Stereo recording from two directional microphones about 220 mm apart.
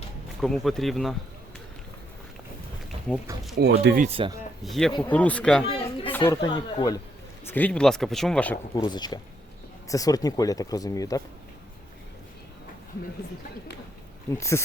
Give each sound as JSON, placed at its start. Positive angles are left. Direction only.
{"t": 0.4, "sound": "speech", "side_deg": 0}
{"t": 3.6, "sound": "speech", "side_deg": -45}
{"t": 4.1, "sound": "speech", "side_deg": -25}
{"t": 4.6, "sound": "speech", "side_deg": 0}
{"t": 5.6, "sound": "speech", "side_deg": 25}
{"t": 6.1, "sound": "speech", "side_deg": 10}
{"t": 6.4, "sound": "speech", "side_deg": 20}
{"t": 7.4, "sound": "speech", "side_deg": 10}
{"t": 8.7, "sound": "speech", "side_deg": 20}
{"t": 14.3, "sound": "speech", "side_deg": 15}